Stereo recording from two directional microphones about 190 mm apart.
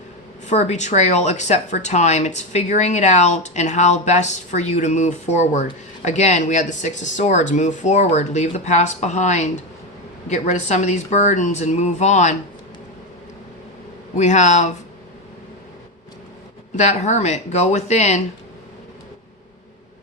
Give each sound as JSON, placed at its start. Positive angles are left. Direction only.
{"t": 0.4, "sound": "speech", "side_deg": 40}
{"t": 14.2, "sound": "speech", "side_deg": 40}
{"t": 16.7, "sound": "speech", "side_deg": 35}